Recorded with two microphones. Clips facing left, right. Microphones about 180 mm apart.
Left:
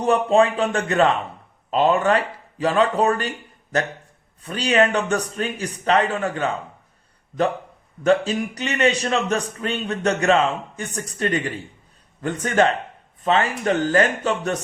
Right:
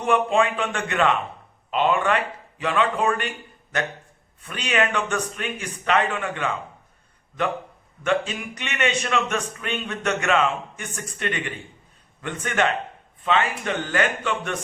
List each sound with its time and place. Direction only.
0.0 s a man's voice: 35° left (ahead or behind)
8.0 s a man's voice: 35° left (ahead or behind)